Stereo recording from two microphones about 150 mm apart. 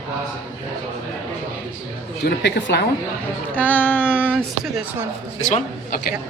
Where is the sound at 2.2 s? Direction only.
90° left.